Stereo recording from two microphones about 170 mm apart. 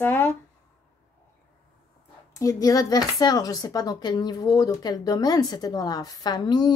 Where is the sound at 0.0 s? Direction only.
15° left (ahead or behind).